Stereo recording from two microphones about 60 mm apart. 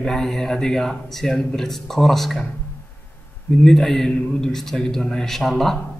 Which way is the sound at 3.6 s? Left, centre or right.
Centre.